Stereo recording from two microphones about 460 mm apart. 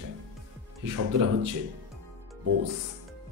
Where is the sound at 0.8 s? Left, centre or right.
Right.